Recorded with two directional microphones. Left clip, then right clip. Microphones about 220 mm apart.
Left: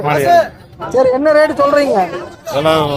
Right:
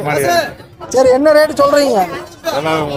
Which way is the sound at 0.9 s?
5° right (ahead or behind).